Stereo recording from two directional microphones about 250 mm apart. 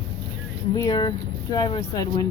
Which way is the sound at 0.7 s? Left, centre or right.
Centre.